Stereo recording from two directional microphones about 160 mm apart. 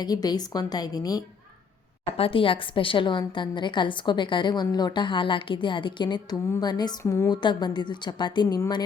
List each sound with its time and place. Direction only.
0.0 s a woman's voice: 25° left (ahead or behind)
2.1 s a woman's voice: 35° left (ahead or behind); by 7.3 s 20° left (ahead or behind)
7.3 s a woman's voice: 30° left (ahead or behind)